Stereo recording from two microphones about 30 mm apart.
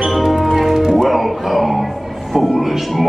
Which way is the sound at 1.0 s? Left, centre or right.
Centre.